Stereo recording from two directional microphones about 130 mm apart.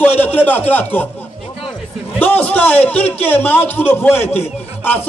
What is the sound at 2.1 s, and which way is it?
A man's voice, 10° left (ahead or behind).